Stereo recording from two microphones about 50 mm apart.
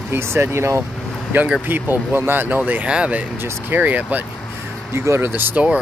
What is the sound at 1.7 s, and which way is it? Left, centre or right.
Speech, right.